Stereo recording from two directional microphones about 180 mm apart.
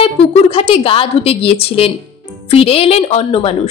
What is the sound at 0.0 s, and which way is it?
A woman's voice, 35° left (ahead or behind).